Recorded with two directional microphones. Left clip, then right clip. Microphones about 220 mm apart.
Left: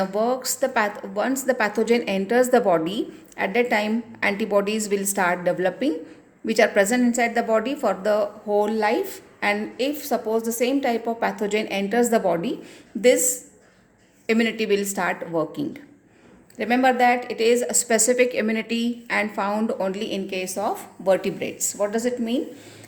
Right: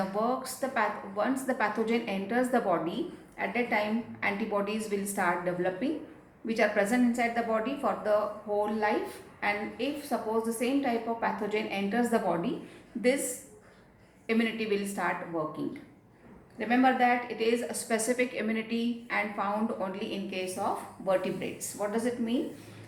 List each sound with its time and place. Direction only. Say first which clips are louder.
0.2 s a woman's voice: left 8 dB; 50° left (ahead or behind)
14.3 s a woman's voice: left 8 dB; 50° left (ahead or behind)
16.6 s a woman's voice: left 6 dB; 50° left (ahead or behind)